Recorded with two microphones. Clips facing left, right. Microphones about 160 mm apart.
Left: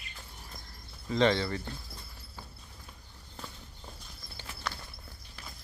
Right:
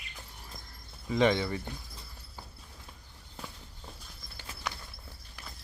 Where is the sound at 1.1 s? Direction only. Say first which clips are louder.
Even; 10° right (ahead or behind).